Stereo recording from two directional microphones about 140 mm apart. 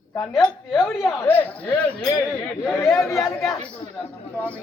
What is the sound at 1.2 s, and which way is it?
Speech, 15° left (ahead or behind).